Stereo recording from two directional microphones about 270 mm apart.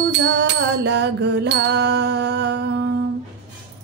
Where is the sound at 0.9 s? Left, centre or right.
Right.